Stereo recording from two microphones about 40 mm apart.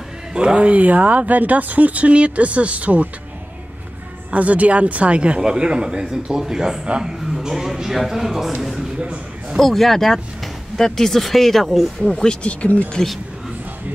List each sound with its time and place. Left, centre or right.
0.3 s speech: right
4.3 s speech: right; by 8.8 s centre
9.0 s a sound: right
9.6 s speech: centre
12.1 s speech: centre
12.4 s speech: left